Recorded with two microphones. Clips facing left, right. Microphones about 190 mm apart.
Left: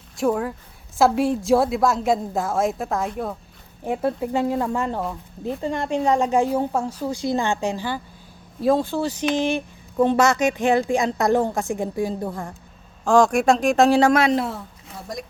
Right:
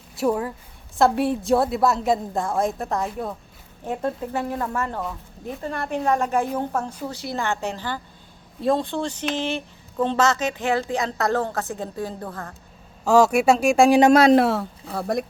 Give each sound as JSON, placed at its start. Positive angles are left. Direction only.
{"t": 0.2, "sound": "a woman's voice", "side_deg": -5}
{"t": 3.8, "sound": "a woman's voice", "side_deg": 10}
{"t": 13.1, "sound": "speech", "side_deg": -5}
{"t": 14.1, "sound": "a man's voice", "side_deg": -35}
{"t": 14.3, "sound": "speech", "side_deg": -75}
{"t": 14.9, "sound": "speech", "side_deg": -60}